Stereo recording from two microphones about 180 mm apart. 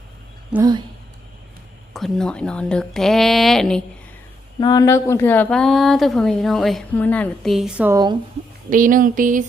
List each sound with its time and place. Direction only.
0.6 s speech: 20° right (ahead or behind)
1.9 s speech: centre (ahead or behind)
4.6 s speech: 20° left (ahead or behind); by 7.9 s 5° right (ahead or behind)
8.7 s speech: 50° right (ahead or behind)